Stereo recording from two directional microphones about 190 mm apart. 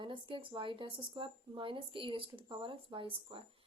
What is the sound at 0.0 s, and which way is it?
A woman's voice, 25° right (ahead or behind).